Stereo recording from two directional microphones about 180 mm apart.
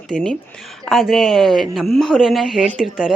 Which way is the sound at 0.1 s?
5° left (ahead or behind).